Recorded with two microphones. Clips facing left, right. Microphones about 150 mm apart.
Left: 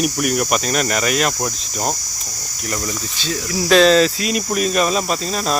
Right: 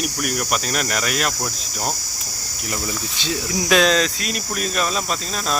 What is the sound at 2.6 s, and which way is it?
Cricket, 5° right (ahead or behind).